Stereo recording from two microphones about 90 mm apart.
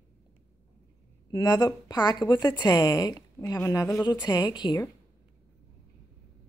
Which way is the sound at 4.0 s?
55° left (ahead or behind).